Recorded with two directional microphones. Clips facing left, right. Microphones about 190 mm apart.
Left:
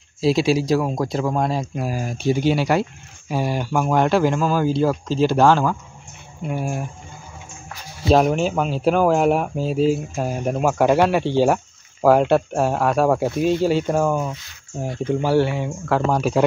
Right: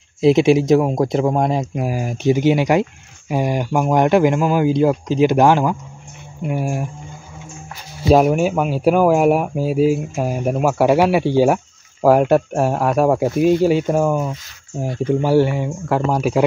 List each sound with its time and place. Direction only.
0.2 s speech: 20° right (ahead or behind)
8.1 s speech: 10° right (ahead or behind)
15.4 s speech: 10° right (ahead or behind)